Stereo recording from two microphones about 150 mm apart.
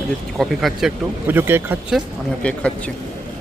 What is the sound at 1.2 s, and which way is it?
Speech, 15° right (ahead or behind).